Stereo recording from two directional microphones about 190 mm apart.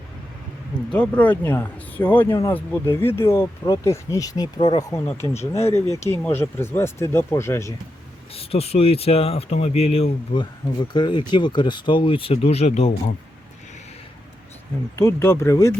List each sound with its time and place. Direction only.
0.9 s speech: 5° left (ahead or behind)
8.3 s speech: 30° left (ahead or behind)
14.9 s speech: 15° left (ahead or behind)